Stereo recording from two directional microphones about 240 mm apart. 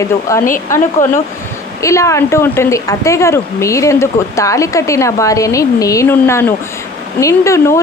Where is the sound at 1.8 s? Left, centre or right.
Centre.